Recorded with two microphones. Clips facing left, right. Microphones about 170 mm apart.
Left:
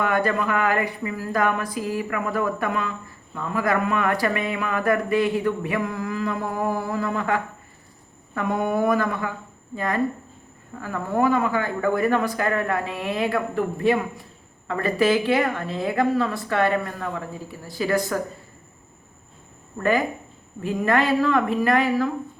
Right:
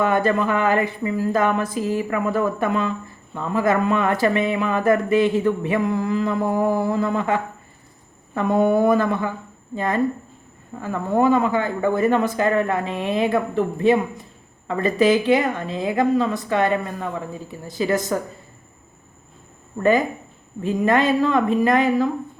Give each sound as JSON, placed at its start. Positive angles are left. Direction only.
{"t": 0.0, "sound": "speech", "side_deg": -25}
{"t": 20.6, "sound": "speech", "side_deg": -20}